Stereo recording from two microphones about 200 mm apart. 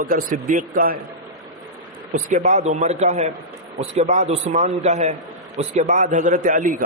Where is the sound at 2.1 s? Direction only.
35° right (ahead or behind).